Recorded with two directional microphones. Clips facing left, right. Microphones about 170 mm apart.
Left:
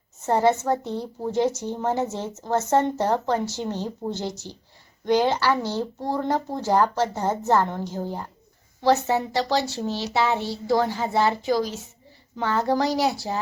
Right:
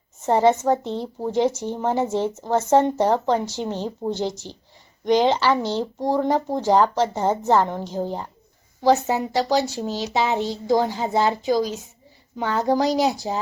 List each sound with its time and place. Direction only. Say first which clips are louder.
0.3 s speech: right 3 dB; 15° right (ahead or behind)